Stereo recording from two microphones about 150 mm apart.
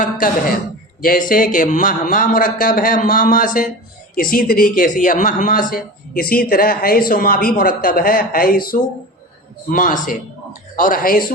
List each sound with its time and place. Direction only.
0.0 s a man's voice: 65° left (ahead or behind)